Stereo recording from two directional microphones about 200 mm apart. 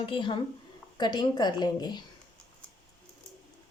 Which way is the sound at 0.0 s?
25° left (ahead or behind).